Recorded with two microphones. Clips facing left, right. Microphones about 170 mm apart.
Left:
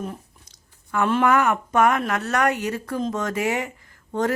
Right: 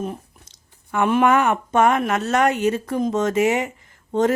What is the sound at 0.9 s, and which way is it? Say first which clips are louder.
Speech: right 3 dB; 20° right (ahead or behind).